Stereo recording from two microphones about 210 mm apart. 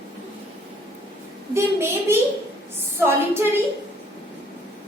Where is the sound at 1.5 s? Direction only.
10° right (ahead or behind).